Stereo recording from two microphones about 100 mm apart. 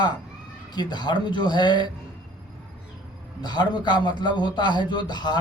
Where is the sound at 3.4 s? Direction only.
45° left (ahead or behind).